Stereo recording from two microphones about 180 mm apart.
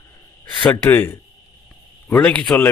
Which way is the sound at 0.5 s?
10° left (ahead or behind).